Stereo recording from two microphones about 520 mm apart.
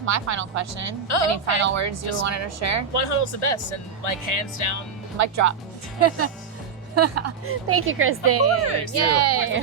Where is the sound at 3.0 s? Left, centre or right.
Left.